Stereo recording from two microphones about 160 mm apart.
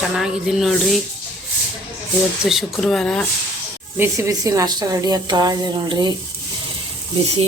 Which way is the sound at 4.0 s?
15° right (ahead or behind).